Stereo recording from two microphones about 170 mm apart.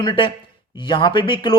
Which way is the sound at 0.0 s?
30° left (ahead or behind).